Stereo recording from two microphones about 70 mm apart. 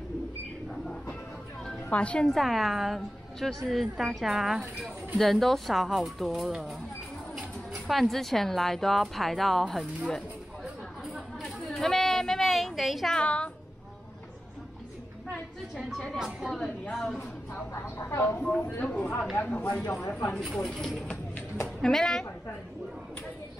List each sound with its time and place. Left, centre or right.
1.6 s a sound: centre
2.2 s speech: centre
11.1 s a sound: centre
13.1 s speech: centre
16.2 s a woman's voice: centre
16.9 s speech: centre
17.7 s a woman's voice: left
18.4 s speech: centre
18.8 s speech: centre
19.8 s speech: left
20.1 s speech: left
20.3 s speech: centre